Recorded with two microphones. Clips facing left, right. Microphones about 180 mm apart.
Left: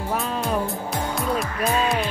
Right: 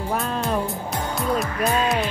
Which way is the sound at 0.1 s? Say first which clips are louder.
Even; centre (ahead or behind).